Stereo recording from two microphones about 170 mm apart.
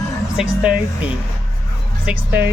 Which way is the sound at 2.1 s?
10° right (ahead or behind).